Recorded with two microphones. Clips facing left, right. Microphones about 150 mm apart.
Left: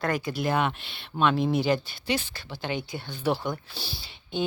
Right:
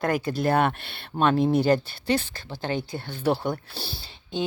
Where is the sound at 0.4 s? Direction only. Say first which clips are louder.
Right 4 dB; 50° right (ahead or behind).